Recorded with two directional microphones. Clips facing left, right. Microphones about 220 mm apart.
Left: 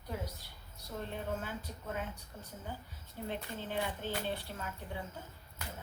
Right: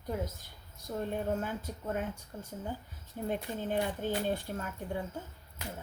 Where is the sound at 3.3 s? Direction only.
45° right (ahead or behind).